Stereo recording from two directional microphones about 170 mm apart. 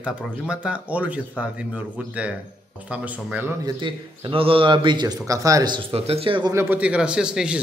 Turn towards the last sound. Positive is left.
turn(degrees=-5)  # may be behind; listen again after turning